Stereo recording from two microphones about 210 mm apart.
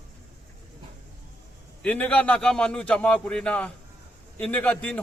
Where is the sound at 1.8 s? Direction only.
5° left (ahead or behind).